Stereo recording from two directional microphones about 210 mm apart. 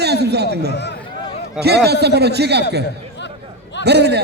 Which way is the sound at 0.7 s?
55° left (ahead or behind).